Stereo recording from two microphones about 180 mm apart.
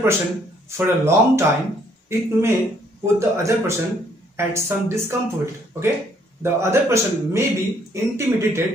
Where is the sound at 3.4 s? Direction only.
15° right (ahead or behind).